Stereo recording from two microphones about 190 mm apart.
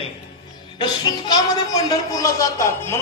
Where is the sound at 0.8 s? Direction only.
20° left (ahead or behind).